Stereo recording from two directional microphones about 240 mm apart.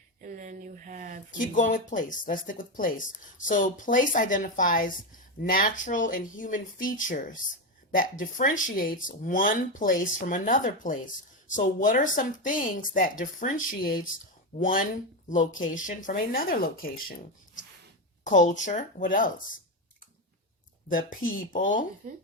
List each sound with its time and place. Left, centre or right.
0.2 s a sound: right
1.5 s speech: left
21.5 s speech: left